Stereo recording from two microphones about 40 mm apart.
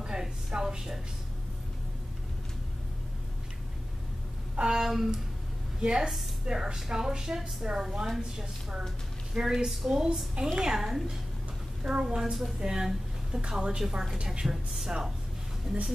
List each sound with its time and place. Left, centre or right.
0.0 s a woman's voice: centre
4.6 s a woman's voice: centre
11.8 s a woman's voice: right
12.2 s a woman's voice: centre